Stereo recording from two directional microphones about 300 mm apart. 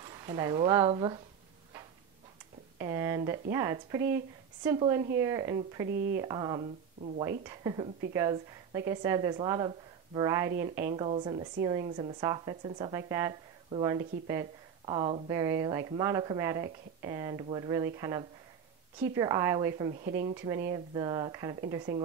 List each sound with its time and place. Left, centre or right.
0.0 s speech: centre
2.8 s a woman's voice: centre
5.9 s speech: right
6.2 s a woman's voice: centre
19.9 s speech: right
20.3 s a woman's voice: centre